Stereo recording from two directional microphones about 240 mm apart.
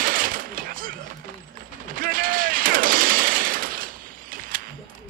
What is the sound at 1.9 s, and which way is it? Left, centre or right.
Machine gun, right.